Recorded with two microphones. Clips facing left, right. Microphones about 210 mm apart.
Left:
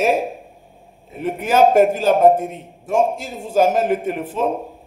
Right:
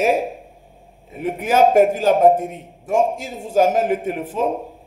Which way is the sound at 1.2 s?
10° right (ahead or behind).